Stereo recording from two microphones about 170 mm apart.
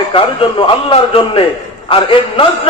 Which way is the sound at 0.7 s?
30° left (ahead or behind).